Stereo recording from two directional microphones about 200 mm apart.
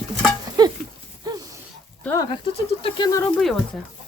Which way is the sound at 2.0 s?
15° left (ahead or behind).